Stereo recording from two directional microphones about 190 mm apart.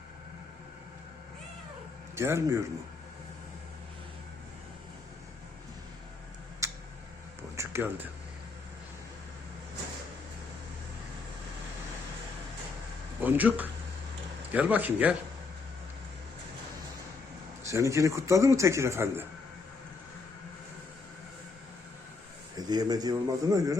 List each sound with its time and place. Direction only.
2.1 s a man's voice: 15° right (ahead or behind)
6.6 s tick-tock: 15° right (ahead or behind)
7.5 s music: 15° right (ahead or behind)
13.2 s a man's voice: 10° right (ahead or behind)
17.7 s a man's voice: 15° right (ahead or behind)
22.5 s a man's voice: 20° right (ahead or behind)